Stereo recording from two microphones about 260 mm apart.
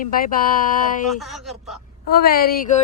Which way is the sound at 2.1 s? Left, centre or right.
Left.